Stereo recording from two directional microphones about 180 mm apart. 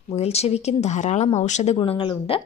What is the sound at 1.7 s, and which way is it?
Speech, 25° left (ahead or behind).